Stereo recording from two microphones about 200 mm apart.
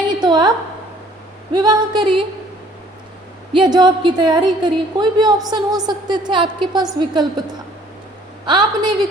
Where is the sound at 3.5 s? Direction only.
20° right (ahead or behind).